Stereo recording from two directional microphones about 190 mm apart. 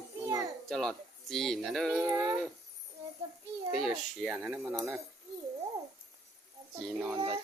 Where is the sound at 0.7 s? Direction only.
Centre (ahead or behind).